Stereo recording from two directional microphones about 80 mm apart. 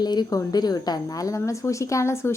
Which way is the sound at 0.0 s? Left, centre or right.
Left.